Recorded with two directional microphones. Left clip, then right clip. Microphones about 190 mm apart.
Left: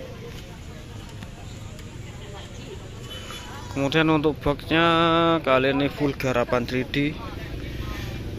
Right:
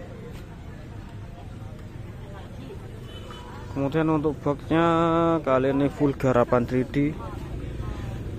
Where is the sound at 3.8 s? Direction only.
5° right (ahead or behind).